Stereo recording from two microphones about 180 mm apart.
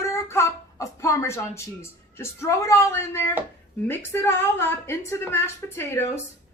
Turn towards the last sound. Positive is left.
turn(degrees=15)  # may be behind; listen again after turning